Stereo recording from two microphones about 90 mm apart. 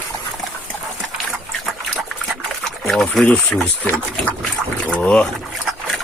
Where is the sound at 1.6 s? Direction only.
Centre (ahead or behind).